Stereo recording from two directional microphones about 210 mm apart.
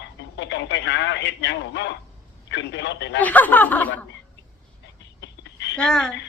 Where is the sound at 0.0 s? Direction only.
55° left (ahead or behind).